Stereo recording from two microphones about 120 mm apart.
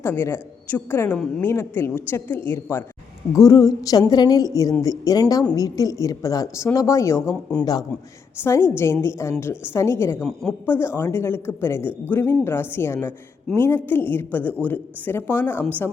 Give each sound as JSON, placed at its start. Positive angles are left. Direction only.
{"t": 0.0, "sound": "a woman's voice", "side_deg": 20}
{"t": 8.4, "sound": "a woman's voice", "side_deg": 20}